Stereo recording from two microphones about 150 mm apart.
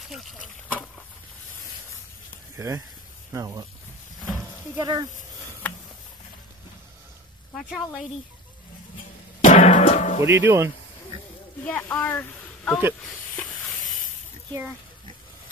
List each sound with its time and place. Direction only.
2.5 s speech: 20° right (ahead or behind)
4.7 s speech: 25° right (ahead or behind)
7.5 s speech: centre (ahead or behind)
9.4 s music: 60° left (ahead or behind)
10.2 s speech: 15° right (ahead or behind)
11.6 s speech: 10° left (ahead or behind)